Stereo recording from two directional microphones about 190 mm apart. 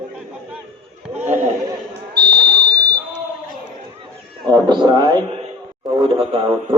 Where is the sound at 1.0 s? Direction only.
10° right (ahead or behind).